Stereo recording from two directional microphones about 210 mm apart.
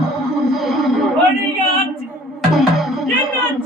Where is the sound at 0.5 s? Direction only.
Centre (ahead or behind).